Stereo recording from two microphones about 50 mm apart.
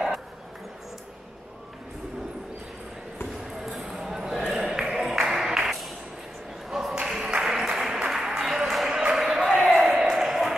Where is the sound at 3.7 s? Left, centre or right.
Centre.